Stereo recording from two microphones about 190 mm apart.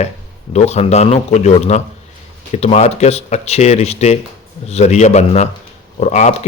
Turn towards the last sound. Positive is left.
turn(degrees=40)  # may be behind; listen again after turning